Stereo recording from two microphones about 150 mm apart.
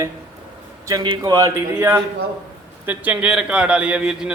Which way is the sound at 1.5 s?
15° right (ahead or behind).